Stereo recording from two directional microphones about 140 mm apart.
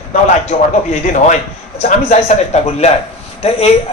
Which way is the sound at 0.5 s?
75° left (ahead or behind).